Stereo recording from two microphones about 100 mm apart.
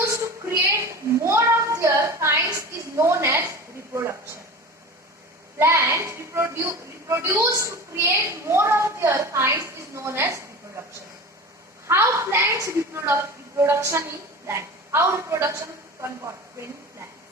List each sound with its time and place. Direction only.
0.0 s a sound: 30° right (ahead or behind)
5.5 s a woman's voice: 30° right (ahead or behind)
11.9 s a woman's voice: 25° right (ahead or behind)